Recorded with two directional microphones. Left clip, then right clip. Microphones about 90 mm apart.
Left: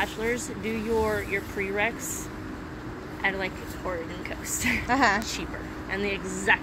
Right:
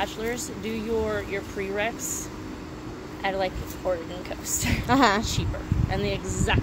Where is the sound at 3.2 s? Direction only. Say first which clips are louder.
Right 1 dB; 50° right (ahead or behind).